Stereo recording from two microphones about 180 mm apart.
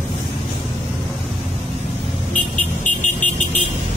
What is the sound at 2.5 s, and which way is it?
Vehicle, 45° left (ahead or behind).